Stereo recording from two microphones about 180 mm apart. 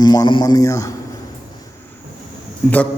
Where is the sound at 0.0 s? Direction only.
20° left (ahead or behind).